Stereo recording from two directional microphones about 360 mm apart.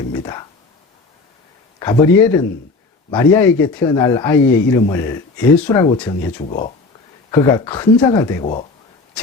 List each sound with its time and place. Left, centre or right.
0.1 s a man's voice: centre
1.8 s a man's voice: centre